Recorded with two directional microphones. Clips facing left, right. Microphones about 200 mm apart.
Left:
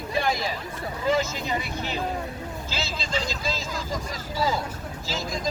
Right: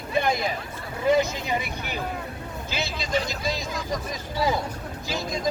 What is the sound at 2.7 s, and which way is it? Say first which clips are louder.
Speech: right 4 dB; 60° right (ahead or behind).